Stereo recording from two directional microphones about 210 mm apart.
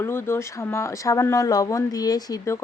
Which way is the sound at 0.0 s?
10° left (ahead or behind).